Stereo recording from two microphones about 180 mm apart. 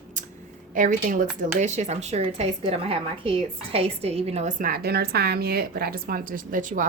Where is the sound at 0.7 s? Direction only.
45° right (ahead or behind).